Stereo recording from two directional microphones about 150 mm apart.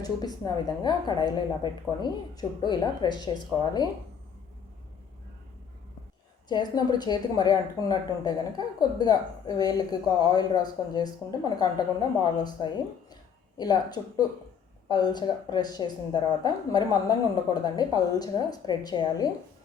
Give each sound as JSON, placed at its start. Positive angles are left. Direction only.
{"t": 0.0, "sound": "a woman's voice", "side_deg": 25}
{"t": 6.5, "sound": "a woman's voice", "side_deg": 30}